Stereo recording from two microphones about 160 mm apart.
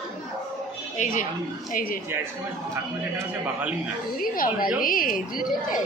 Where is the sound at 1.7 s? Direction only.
65° left (ahead or behind).